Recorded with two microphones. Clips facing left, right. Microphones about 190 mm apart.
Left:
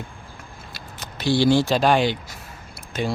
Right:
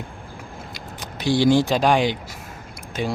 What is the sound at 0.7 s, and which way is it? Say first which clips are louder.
Speech: right 3 dB; 15° right (ahead or behind).